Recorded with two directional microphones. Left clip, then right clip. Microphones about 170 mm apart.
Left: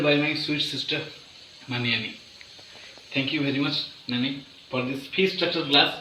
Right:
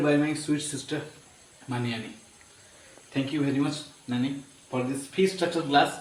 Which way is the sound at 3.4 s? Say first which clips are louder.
Left 2 dB; 15° right (ahead or behind).